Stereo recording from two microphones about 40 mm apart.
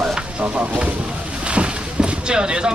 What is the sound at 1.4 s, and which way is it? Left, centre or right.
Boat, right.